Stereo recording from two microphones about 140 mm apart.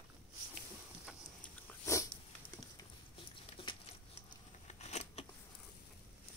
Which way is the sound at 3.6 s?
40° left (ahead or behind).